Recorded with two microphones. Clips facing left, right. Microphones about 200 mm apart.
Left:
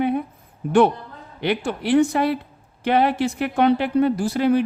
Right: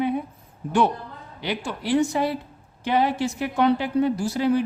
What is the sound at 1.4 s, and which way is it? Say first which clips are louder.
Speech: left 6 dB; 60° left (ahead or behind).